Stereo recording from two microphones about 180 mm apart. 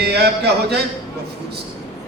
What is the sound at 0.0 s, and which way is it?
Speech, 65° right (ahead or behind).